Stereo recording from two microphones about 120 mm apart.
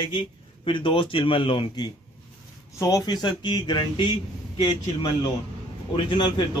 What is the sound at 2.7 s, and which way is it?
Speech, 25° left (ahead or behind).